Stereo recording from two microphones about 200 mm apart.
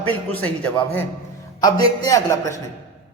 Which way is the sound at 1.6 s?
15° left (ahead or behind).